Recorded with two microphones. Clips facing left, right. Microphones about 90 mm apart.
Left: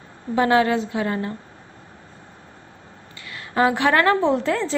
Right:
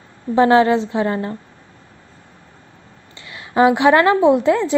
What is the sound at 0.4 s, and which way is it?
Speech, 30° right (ahead or behind).